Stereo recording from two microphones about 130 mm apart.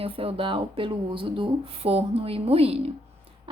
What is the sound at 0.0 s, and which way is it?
Speech, 45° right (ahead or behind).